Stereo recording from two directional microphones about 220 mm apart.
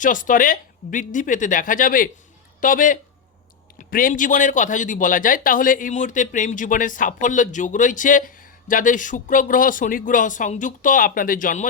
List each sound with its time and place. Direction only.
0.0 s a man's voice: 35° left (ahead or behind)